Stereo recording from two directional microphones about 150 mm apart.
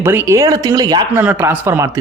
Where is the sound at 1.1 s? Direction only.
10° right (ahead or behind).